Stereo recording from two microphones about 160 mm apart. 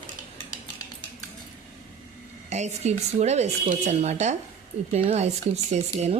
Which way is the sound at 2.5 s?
45° right (ahead or behind).